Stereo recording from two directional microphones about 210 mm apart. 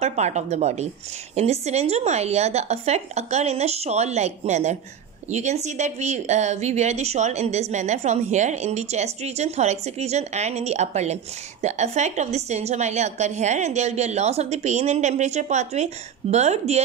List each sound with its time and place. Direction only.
0.0 s speech: 35° right (ahead or behind)